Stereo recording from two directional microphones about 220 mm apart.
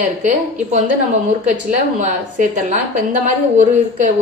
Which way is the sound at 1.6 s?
35° right (ahead or behind).